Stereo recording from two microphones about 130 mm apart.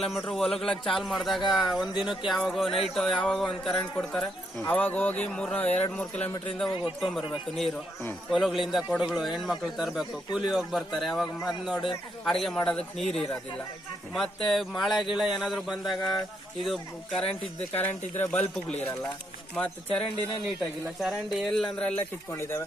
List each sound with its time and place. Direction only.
0.0 s a man's voice: centre (ahead or behind)
4.6 s speech: 15° left (ahead or behind)
6.7 s speech: 40° left (ahead or behind)
7.0 s a man's voice: centre (ahead or behind)
14.4 s a man's voice: centre (ahead or behind)
22.3 s speech: 20° left (ahead or behind)